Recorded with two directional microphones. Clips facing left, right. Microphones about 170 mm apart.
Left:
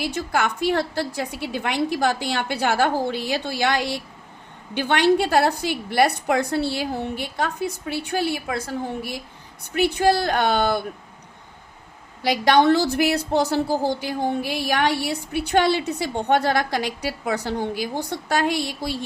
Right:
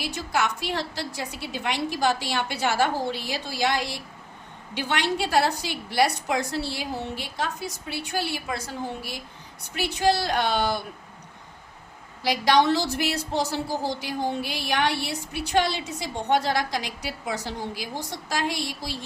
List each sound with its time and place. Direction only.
0.0 s a woman's voice: 55° left (ahead or behind)
12.2 s a woman's voice: 60° left (ahead or behind)